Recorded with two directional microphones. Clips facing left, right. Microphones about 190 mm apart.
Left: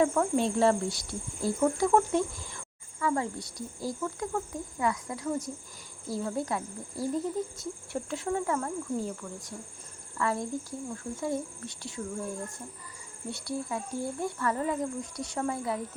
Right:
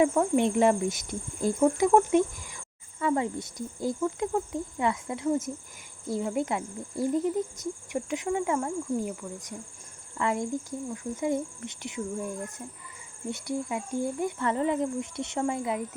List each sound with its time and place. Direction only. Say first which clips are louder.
0.0 s speech: right 3 dB; 20° right (ahead or behind)
13.3 s speech: right 2 dB; 20° right (ahead or behind)